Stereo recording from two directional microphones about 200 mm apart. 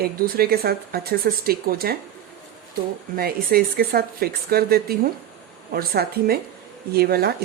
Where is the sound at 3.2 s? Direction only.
50° right (ahead or behind).